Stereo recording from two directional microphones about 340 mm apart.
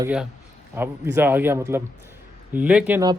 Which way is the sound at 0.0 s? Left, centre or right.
Centre.